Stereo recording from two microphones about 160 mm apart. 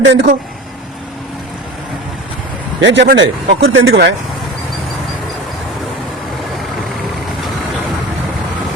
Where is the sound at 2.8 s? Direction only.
90° right.